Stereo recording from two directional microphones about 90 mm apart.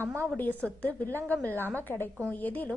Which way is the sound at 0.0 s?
30° right (ahead or behind).